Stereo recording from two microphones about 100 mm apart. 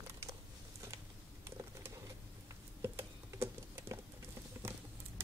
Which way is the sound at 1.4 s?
25° right (ahead or behind).